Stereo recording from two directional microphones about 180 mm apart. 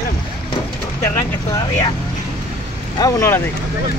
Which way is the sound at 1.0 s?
20° left (ahead or behind).